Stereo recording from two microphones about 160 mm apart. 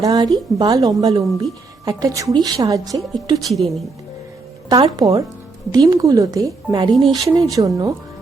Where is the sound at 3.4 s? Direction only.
Centre (ahead or behind).